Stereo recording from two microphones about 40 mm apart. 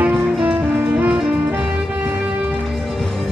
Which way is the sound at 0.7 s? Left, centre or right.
Right.